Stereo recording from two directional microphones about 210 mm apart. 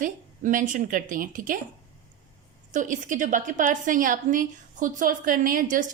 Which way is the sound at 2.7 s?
40° right (ahead or behind).